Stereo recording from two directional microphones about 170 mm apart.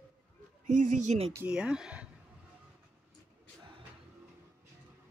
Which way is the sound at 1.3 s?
10° right (ahead or behind).